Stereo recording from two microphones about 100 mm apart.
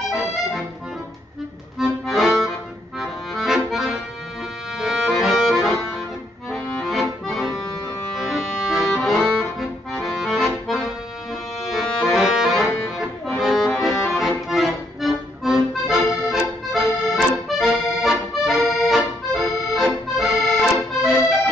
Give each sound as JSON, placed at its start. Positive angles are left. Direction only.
{"t": 0.1, "sound": "music", "side_deg": -5}
{"t": 1.8, "sound": "accordion", "side_deg": 0}